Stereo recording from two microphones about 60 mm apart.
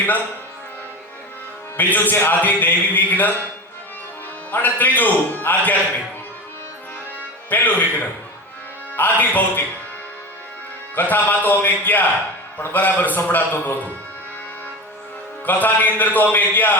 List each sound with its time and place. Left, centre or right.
1.7 s a man's voice: left
4.5 s a man's voice: left
7.5 s a man's voice: left
10.9 s a man's voice: left
15.4 s a man's voice: left